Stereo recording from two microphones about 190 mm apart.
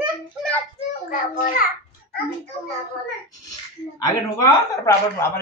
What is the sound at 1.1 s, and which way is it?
Speech, 45° left (ahead or behind).